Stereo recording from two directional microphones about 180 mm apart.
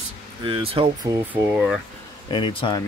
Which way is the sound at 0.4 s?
30° right (ahead or behind).